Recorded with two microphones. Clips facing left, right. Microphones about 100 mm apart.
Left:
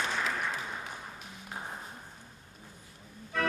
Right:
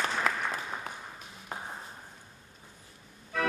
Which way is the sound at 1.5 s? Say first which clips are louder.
Right 2 dB; 50° right (ahead or behind).